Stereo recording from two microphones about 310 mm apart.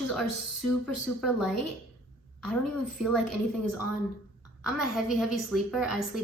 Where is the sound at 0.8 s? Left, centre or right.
Centre.